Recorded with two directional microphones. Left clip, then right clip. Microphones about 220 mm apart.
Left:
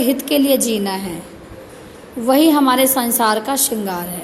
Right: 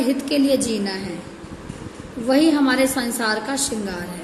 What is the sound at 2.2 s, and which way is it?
A woman's voice, 30° left (ahead or behind).